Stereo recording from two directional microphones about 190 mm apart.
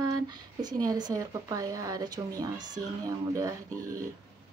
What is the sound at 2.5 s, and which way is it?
Speech, 40° right (ahead or behind).